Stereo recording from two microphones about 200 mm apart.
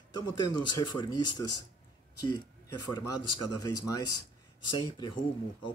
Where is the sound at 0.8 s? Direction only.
20° left (ahead or behind).